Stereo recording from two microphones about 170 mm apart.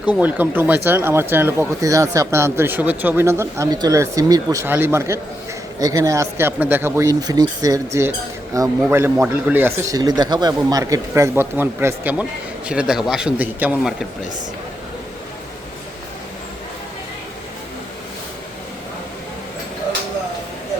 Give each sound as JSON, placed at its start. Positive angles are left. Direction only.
{"t": 0.0, "sound": "a man's voice", "side_deg": -10}